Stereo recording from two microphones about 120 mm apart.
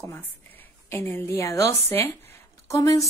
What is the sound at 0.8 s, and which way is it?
A woman's voice, 20° left (ahead or behind).